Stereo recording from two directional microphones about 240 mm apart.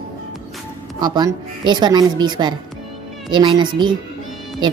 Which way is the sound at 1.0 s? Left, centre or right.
Centre.